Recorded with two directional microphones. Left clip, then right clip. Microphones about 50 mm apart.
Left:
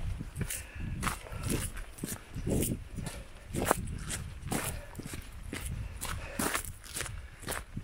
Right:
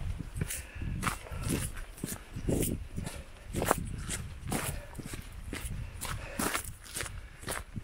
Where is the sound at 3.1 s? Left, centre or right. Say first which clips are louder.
Left 1 dB; left.